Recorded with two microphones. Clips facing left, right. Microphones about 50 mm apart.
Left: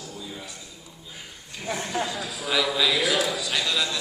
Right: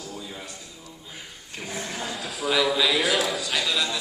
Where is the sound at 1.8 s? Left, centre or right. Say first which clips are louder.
Left 6 dB; left.